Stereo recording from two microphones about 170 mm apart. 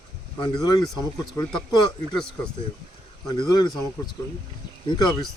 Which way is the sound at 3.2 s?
25° left (ahead or behind).